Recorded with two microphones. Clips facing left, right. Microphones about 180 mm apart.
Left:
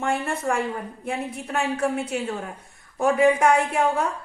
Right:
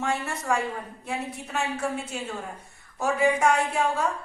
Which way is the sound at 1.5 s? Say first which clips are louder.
Left 5 dB; 60° left (ahead or behind).